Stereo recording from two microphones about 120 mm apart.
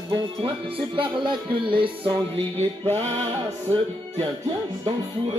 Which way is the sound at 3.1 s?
55° right (ahead or behind).